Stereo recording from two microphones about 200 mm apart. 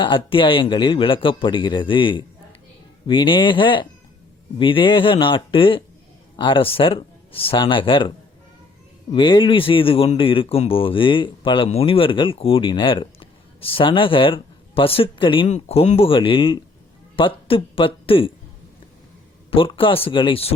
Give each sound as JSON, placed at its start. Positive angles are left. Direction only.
{"t": 0.0, "sound": "speech", "side_deg": 25}
{"t": 9.1, "sound": "speech", "side_deg": 25}
{"t": 19.5, "sound": "speech", "side_deg": 25}